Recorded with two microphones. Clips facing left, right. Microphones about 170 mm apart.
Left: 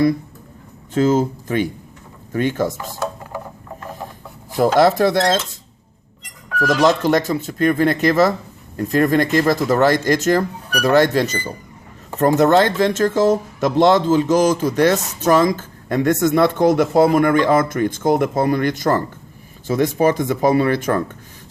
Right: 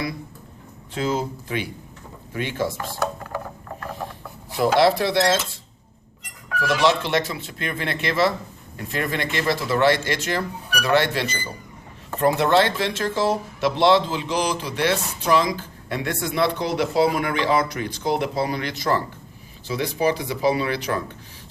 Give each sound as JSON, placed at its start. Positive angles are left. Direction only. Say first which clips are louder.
{"t": 0.9, "sound": "speech", "louder": "left 9 dB", "side_deg": 45}
{"t": 4.5, "sound": "speech", "louder": "left 4 dB", "side_deg": 45}
{"t": 6.8, "sound": "speech", "louder": "left 5 dB", "side_deg": 40}